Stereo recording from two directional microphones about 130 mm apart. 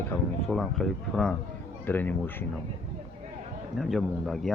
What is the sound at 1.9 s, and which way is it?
Speech, 15° left (ahead or behind).